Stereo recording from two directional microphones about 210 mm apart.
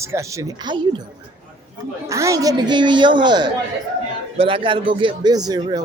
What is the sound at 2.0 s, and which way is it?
A man's voice, 15° right (ahead or behind).